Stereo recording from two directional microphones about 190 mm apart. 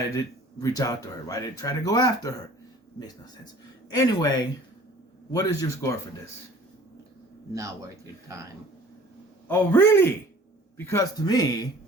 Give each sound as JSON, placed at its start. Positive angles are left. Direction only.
{"t": 0.6, "sound": "speech", "side_deg": 20}
{"t": 3.8, "sound": "a man's voice", "side_deg": 20}
{"t": 7.5, "sound": "speech", "side_deg": -15}
{"t": 9.5, "sound": "a man's voice", "side_deg": 10}